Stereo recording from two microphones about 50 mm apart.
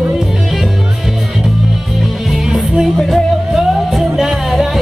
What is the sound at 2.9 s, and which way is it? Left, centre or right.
Music, centre.